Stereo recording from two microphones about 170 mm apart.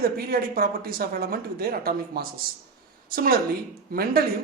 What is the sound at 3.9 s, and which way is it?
Speech, 60° right (ahead or behind).